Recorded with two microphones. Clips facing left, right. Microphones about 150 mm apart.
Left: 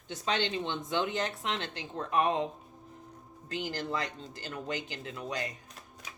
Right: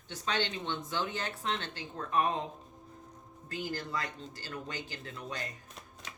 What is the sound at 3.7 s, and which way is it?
Speech, 25° left (ahead or behind).